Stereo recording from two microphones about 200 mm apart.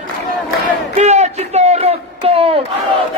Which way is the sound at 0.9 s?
35° right (ahead or behind).